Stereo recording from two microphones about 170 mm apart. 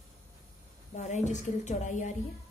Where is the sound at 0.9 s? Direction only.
45° left (ahead or behind).